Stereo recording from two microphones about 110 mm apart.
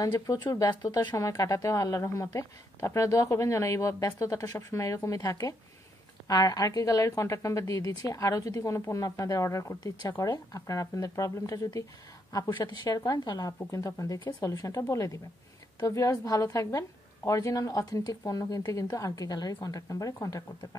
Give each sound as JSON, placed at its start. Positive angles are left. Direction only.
{"t": 0.0, "sound": "a woman's voice", "side_deg": 35}
{"t": 13.5, "sound": "speech", "side_deg": 30}